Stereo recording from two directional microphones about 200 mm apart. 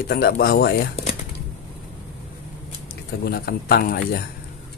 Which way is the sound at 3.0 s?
50° left (ahead or behind).